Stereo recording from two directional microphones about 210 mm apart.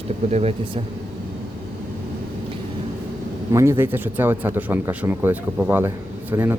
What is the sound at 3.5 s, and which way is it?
Speech, 15° right (ahead or behind).